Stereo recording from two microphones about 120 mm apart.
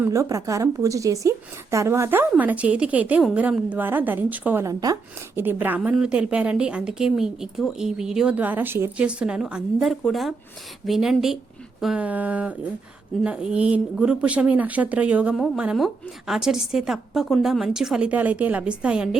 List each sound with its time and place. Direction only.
0.1 s a woman's voice: 30° right (ahead or behind)
4.6 s speech: 30° right (ahead or behind)
5.4 s a woman's voice: 15° right (ahead or behind)
9.0 s a woman's voice: 10° right (ahead or behind)